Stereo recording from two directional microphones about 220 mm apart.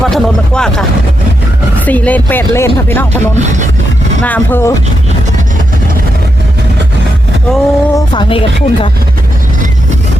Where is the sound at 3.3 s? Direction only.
35° right (ahead or behind).